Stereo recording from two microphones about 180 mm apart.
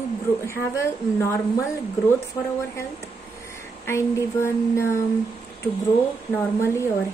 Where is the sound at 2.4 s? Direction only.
20° left (ahead or behind).